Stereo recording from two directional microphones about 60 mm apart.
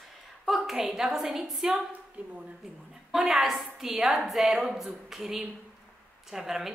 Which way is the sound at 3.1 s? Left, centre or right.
Centre.